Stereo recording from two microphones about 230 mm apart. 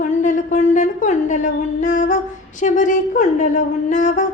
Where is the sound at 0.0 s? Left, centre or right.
Left.